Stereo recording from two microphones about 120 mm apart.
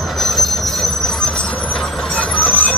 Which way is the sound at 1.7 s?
10° left (ahead or behind).